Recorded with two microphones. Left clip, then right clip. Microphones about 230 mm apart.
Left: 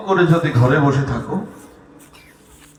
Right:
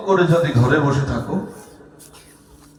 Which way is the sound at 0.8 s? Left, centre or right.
Left.